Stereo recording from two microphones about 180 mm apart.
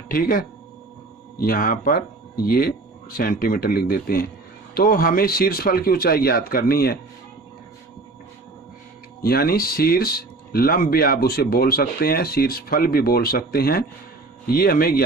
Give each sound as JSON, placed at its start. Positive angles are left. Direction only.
{"t": 0.1, "sound": "speech", "side_deg": 55}
{"t": 1.5, "sound": "speech", "side_deg": 50}
{"t": 9.2, "sound": "speech", "side_deg": 55}